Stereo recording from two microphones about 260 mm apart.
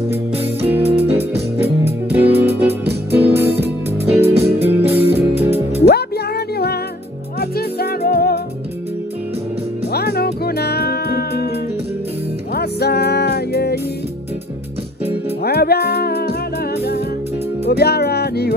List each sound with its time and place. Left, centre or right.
0.1 s music: centre
5.9 s music: left
9.9 s music: left
12.5 s music: left
15.4 s music: left
17.6 s music: left